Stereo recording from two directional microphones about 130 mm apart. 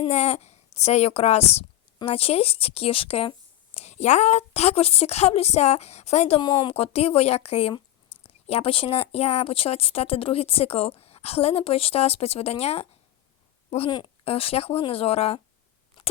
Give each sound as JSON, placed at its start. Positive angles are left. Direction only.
{"t": 0.0, "sound": "a child's voice", "side_deg": 55}
{"t": 3.8, "sound": "speech", "side_deg": 60}
{"t": 6.4, "sound": "a woman's voice", "side_deg": 35}
{"t": 6.7, "sound": "a woman's voice", "side_deg": 50}